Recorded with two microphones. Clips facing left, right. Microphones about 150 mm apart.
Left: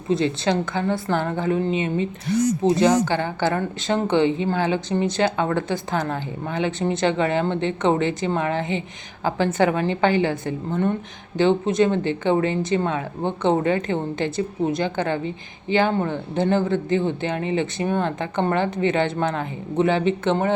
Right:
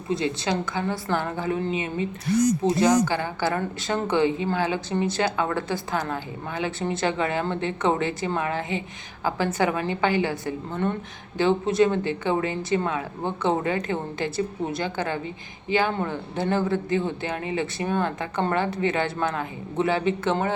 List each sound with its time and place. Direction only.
0.1 s speech: 25° left (ahead or behind)